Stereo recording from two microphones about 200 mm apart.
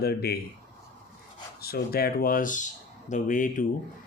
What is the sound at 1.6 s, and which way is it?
Speech, 50° left (ahead or behind).